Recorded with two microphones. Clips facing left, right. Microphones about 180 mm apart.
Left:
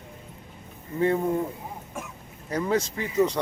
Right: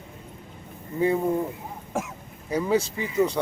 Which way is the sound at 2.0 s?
90° right.